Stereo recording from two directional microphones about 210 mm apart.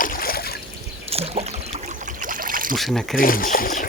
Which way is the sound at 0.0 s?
40° left (ahead or behind).